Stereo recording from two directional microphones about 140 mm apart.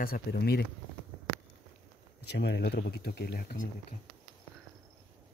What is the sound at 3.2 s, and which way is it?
Speech, 90° left.